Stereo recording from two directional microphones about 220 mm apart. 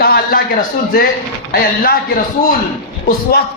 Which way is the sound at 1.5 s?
45° left (ahead or behind).